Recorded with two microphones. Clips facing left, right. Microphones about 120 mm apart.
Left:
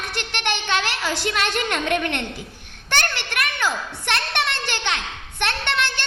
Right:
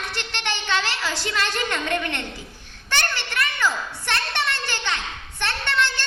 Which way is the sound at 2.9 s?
65° left (ahead or behind).